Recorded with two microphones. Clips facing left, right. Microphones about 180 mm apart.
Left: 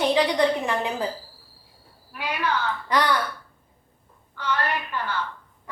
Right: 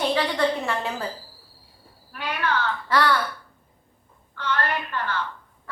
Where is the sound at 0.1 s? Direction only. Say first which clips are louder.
Left 2 dB; 15° left (ahead or behind).